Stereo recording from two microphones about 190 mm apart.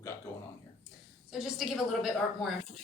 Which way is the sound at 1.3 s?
Centre (ahead or behind).